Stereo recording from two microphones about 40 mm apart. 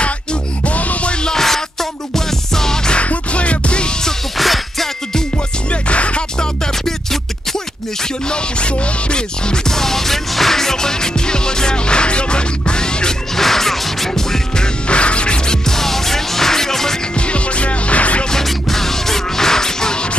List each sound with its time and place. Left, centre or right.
0.0 s music: left
1.2 s music: centre
3.0 s music: left
4.4 s music: centre
5.7 s music: left; by 7.2 s centre
8.0 s music: left
9.7 s music: centre
13.4 s music: centre
14.9 s music: left; by 17.0 s centre
17.1 s music: left
18.3 s music: centre